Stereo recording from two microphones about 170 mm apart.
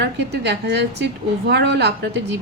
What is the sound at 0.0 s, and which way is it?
A woman's voice, 80° right.